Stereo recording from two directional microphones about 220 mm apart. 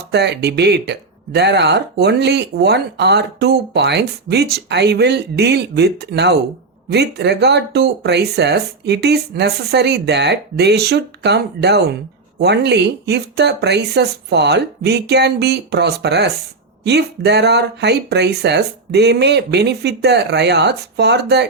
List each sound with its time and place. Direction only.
0.1 s speech: 50° right (ahead or behind)